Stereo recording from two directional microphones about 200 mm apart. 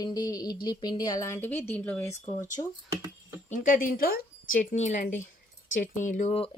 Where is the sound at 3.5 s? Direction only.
40° left (ahead or behind).